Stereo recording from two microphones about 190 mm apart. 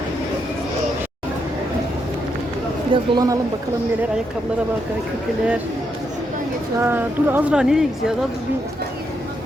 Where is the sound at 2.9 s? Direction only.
20° right (ahead or behind).